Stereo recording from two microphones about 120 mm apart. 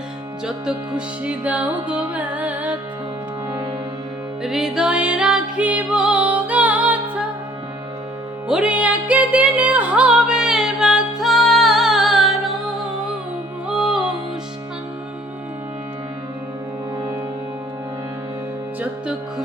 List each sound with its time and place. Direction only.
0.4 s music: 5° right (ahead or behind)
4.4 s music: 5° right (ahead or behind)
8.4 s music: 10° right (ahead or behind)
13.7 s music: 5° right (ahead or behind)